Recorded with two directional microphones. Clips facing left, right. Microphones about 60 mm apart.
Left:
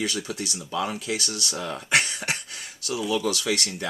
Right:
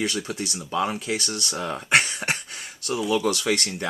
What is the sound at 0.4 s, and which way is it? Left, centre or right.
Speech, right.